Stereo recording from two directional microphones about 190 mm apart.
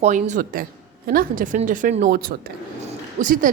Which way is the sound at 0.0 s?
40° right (ahead or behind).